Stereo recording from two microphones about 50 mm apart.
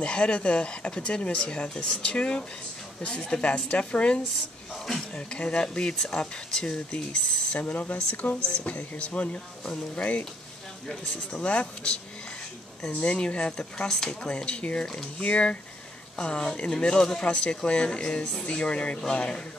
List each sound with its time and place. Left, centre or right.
0.0 s speech: centre
7.6 s speech: left
11.4 s speech: left
13.8 s speech: centre